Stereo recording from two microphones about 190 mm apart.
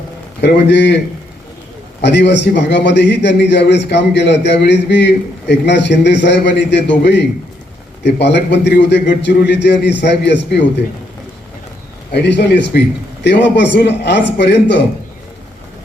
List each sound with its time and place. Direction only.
0.4 s a man's voice: 65° left (ahead or behind)
2.0 s a man's voice: 65° left (ahead or behind)
12.1 s a man's voice: 65° left (ahead or behind)